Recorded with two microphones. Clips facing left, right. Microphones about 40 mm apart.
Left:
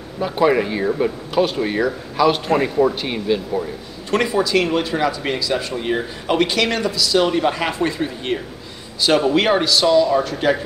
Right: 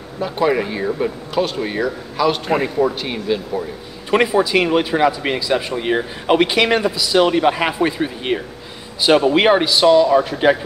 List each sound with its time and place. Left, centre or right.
0.2 s speech: centre
4.1 s speech: centre